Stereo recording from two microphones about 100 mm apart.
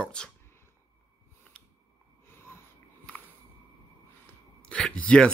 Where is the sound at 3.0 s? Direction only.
15° left (ahead or behind).